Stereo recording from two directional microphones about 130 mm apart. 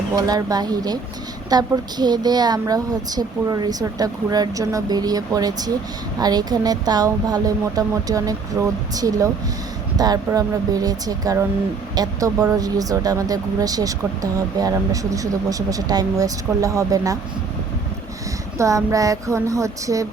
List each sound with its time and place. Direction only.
0.2 s speech: 30° right (ahead or behind)
18.5 s speech: 25° right (ahead or behind)